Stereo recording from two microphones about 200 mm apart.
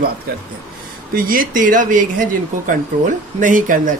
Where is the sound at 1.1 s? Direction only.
45° right (ahead or behind).